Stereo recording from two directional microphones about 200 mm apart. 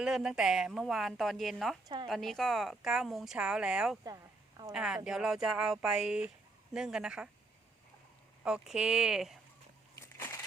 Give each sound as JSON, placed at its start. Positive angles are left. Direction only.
{"t": 0.0, "sound": "speech", "side_deg": -5}
{"t": 4.0, "sound": "a sound", "side_deg": -20}
{"t": 4.7, "sound": "speech", "side_deg": -5}
{"t": 8.4, "sound": "speech", "side_deg": -5}
{"t": 10.2, "sound": "crumpling", "side_deg": 10}